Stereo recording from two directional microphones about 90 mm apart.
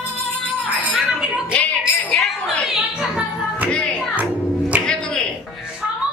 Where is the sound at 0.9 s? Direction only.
5° right (ahead or behind).